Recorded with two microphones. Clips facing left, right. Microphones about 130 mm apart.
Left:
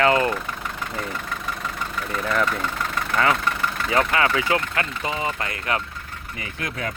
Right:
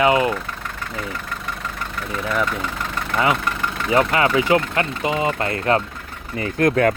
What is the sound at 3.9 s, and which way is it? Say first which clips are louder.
Speech: right 4 dB; 25° right (ahead or behind).